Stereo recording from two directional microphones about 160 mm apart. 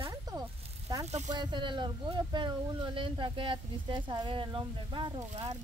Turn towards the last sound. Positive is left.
turn(degrees=-45)  # may be behind; listen again after turning